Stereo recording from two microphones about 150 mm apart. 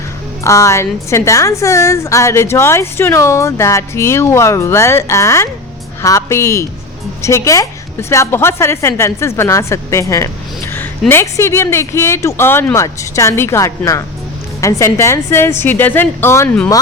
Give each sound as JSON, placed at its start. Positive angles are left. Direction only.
{"t": 0.4, "sound": "a woman's voice", "side_deg": 20}